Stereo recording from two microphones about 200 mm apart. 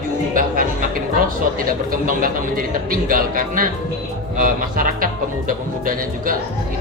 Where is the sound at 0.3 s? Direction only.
45° right (ahead or behind).